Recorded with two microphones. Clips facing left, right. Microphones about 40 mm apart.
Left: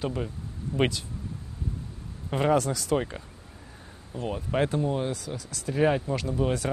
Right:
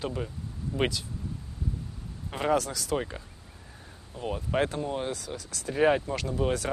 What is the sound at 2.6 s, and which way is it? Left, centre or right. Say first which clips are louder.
Speech: left 3 dB; centre.